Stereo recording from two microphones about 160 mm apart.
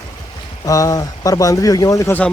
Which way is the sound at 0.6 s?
20° left (ahead or behind).